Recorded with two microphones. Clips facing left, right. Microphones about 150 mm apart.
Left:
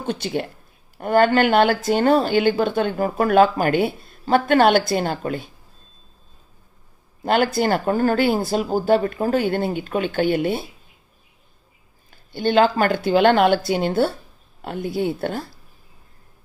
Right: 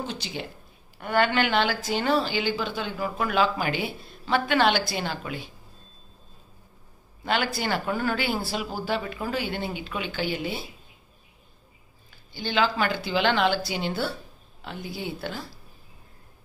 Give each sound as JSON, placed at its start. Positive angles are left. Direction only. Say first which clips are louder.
{"t": 0.0, "sound": "speech", "louder": "left 9 dB", "side_deg": 55}
{"t": 0.9, "sound": "speech", "louder": "left 7 dB", "side_deg": 45}
{"t": 7.2, "sound": "speech", "louder": "left 8 dB", "side_deg": 45}
{"t": 12.1, "sound": "speech", "louder": "left 11 dB", "side_deg": 55}